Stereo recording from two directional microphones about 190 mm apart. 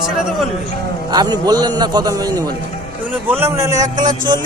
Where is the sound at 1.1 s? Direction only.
20° right (ahead or behind).